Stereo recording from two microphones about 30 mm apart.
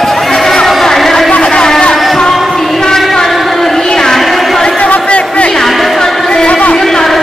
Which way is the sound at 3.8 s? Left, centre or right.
Centre.